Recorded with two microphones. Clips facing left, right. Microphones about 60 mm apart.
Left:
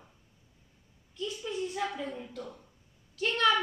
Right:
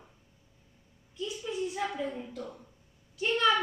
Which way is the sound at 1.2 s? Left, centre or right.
Centre.